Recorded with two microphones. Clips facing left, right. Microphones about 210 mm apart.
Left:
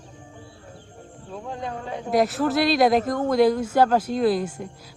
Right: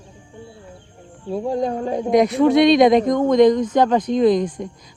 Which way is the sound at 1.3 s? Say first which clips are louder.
Right 11 dB; 35° right (ahead or behind).